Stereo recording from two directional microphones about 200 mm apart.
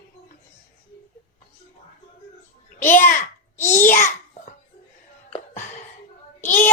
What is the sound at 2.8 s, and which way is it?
A child's voice, 40° left (ahead or behind).